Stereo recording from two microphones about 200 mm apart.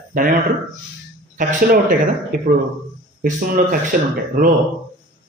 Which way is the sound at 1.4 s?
45° right (ahead or behind).